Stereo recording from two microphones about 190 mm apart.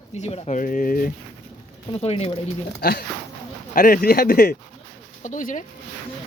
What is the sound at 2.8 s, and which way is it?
Speech, 55° left (ahead or behind).